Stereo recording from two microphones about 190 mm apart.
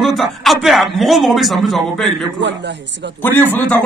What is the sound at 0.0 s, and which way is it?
Speech, centre (ahead or behind).